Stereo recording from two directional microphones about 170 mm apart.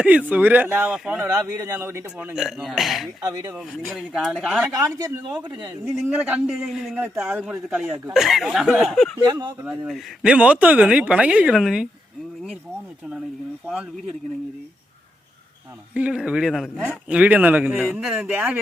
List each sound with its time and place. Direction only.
0.0 s a man's voice: 10° right (ahead or behind)
3.2 s a man's voice: 20° right (ahead or behind)
3.5 s a man's voice: centre (ahead or behind)
4.7 s a man's voice: 20° right (ahead or behind)
5.6 s a man's voice: 10° right (ahead or behind)
9.2 s a man's voice: 25° right (ahead or behind)
9.5 s a man's voice: 5° right (ahead or behind)
16.0 s a man's voice: 5° right (ahead or behind)